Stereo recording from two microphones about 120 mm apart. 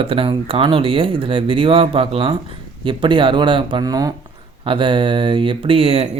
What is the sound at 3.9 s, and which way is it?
Speech, 30° right (ahead or behind).